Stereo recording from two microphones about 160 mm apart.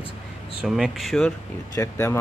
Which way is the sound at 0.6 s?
5° right (ahead or behind).